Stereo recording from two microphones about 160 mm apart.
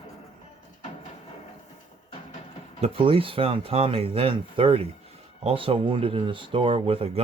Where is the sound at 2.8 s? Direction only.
35° right (ahead or behind).